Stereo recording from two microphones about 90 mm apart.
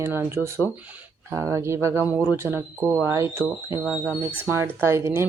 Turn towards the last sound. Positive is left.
turn(degrees=-30)  # may be behind; listen again after turning